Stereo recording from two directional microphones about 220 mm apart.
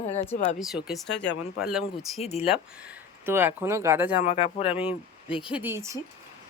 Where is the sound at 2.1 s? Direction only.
30° left (ahead or behind).